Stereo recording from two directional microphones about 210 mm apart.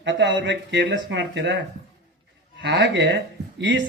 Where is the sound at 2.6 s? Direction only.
60° right (ahead or behind).